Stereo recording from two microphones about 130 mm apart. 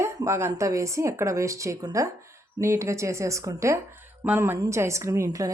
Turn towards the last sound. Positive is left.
turn(degrees=-25)  # may be behind; listen again after turning